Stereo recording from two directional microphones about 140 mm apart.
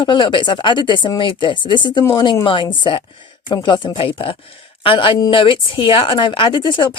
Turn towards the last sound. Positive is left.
turn(degrees=35)  # may be behind; listen again after turning